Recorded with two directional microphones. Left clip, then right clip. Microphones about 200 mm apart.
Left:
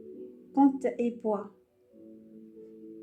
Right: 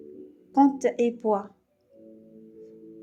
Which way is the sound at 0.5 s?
45° right (ahead or behind).